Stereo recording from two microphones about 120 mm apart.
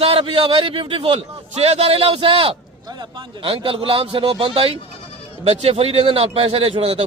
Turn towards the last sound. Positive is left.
turn(degrees=-55)  # may be behind; listen again after turning